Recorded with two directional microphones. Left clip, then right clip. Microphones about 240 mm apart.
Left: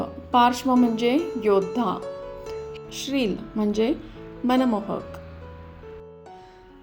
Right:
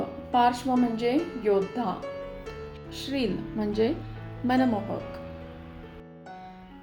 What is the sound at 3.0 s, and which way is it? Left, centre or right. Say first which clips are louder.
Speech: left 4 dB; left.